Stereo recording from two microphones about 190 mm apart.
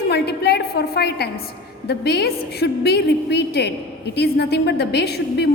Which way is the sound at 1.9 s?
60° left (ahead or behind).